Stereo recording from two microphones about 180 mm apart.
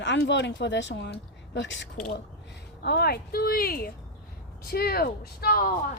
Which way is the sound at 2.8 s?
60° left (ahead or behind).